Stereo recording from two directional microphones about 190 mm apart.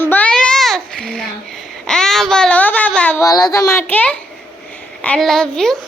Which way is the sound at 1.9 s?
Centre (ahead or behind).